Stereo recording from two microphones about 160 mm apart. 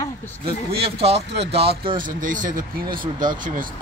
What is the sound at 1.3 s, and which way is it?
Speech, 90° right.